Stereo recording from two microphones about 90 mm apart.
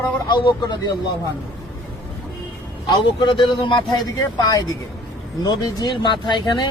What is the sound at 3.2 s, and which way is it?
Speech, 65° left (ahead or behind).